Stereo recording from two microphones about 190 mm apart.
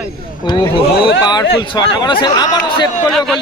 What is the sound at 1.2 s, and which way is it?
A man's voice, 20° left (ahead or behind).